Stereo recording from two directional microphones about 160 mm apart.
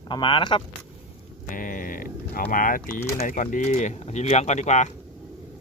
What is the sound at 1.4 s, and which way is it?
Speech, 55° left (ahead or behind).